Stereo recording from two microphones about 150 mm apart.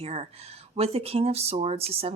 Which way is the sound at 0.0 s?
40° right (ahead or behind).